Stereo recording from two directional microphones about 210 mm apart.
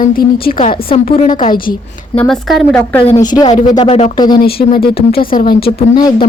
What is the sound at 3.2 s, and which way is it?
Speech, 20° left (ahead or behind).